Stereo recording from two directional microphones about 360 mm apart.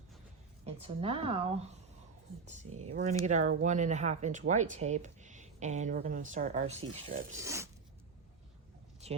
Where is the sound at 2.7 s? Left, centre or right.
Right.